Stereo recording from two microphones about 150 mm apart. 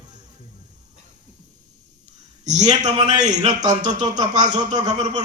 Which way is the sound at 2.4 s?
50° right (ahead or behind).